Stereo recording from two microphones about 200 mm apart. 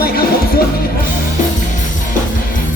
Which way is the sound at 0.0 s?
50° left (ahead or behind).